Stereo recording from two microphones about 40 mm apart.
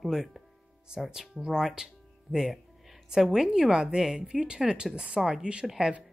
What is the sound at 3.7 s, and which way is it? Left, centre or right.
A woman's voice, right.